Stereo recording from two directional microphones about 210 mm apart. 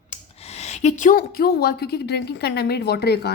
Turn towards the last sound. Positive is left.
turn(degrees=50)  # may be behind; listen again after turning